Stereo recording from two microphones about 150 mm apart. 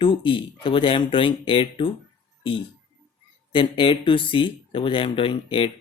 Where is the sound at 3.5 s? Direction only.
35° left (ahead or behind).